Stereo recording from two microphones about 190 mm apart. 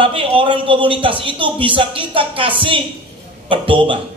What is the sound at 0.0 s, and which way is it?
A man's voice, 30° right (ahead or behind).